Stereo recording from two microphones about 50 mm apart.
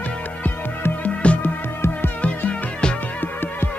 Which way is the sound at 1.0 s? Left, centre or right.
Left.